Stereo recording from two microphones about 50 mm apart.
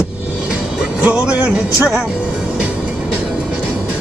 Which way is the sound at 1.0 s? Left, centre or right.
Right.